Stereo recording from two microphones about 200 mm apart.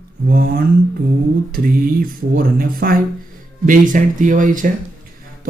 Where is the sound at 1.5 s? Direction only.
45° right (ahead or behind).